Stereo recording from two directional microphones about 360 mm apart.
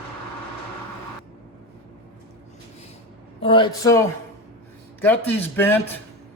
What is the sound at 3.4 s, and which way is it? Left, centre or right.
Speech, centre.